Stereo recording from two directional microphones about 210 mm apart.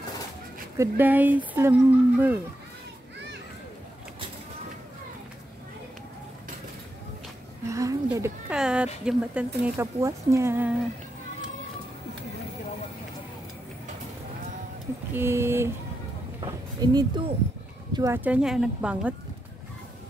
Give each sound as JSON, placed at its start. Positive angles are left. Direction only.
{"t": 0.7, "sound": "speech", "side_deg": -10}
{"t": 7.7, "sound": "speech", "side_deg": -15}
{"t": 8.5, "sound": "speech", "side_deg": -5}
{"t": 15.1, "sound": "speech", "side_deg": -10}